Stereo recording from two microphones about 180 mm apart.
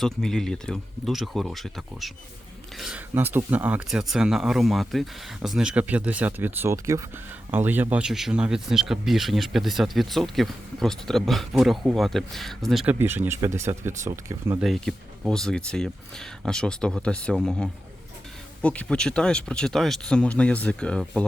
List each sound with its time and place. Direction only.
0.0 s speech: centre (ahead or behind); by 14.6 s 15° right (ahead or behind)
14.6 s speech: centre (ahead or behind)